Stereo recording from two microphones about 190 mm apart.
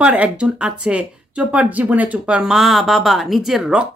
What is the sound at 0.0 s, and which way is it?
Speech, 5° right (ahead or behind).